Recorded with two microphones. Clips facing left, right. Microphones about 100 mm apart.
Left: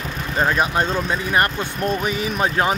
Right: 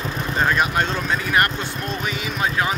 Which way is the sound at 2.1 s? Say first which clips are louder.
Left 3 dB; 40° left (ahead or behind).